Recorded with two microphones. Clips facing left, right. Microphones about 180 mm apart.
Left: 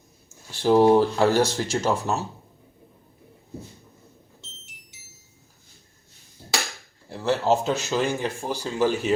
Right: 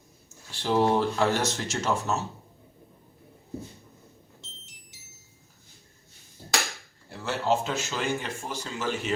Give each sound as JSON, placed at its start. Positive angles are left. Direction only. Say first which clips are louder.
{"t": 0.6, "sound": "speech", "louder": "left 7 dB", "side_deg": 40}
{"t": 7.1, "sound": "speech", "louder": "left 5 dB", "side_deg": 35}